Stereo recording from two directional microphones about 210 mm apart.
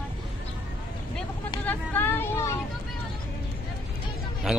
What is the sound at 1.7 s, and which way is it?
Vehicle, 10° left (ahead or behind).